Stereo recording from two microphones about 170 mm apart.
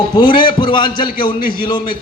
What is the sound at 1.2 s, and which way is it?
Speech, 60° left (ahead or behind).